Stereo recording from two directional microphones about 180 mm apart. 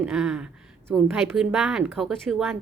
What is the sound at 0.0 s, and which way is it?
A woman's voice, 5° right (ahead or behind).